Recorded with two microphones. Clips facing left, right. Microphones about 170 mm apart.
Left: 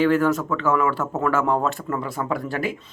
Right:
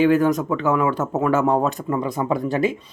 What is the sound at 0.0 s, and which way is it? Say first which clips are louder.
Speech: right 2 dB; 15° right (ahead or behind).